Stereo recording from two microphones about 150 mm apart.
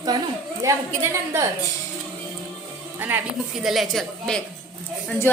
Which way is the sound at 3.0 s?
15° right (ahead or behind).